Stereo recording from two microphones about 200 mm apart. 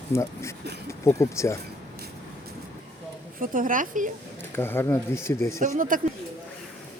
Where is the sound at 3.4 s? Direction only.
40° right (ahead or behind).